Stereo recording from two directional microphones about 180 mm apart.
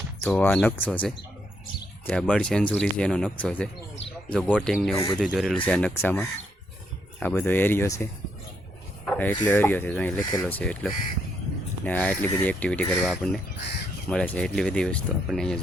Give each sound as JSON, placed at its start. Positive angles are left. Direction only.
{"t": 0.2, "sound": "speech", "side_deg": 10}
{"t": 9.0, "sound": "speech", "side_deg": 10}